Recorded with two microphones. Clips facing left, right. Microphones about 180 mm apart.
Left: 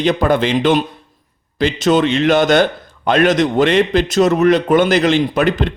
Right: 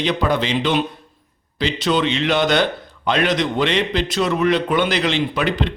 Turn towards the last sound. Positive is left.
turn(degrees=45)  # may be behind; listen again after turning